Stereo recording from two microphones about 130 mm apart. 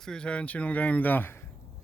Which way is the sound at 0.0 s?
5° left (ahead or behind).